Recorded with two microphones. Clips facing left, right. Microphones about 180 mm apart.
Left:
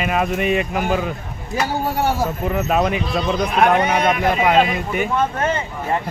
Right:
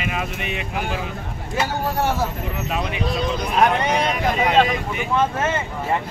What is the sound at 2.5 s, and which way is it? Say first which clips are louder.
Speech: left 7 dB; 50° left (ahead or behind).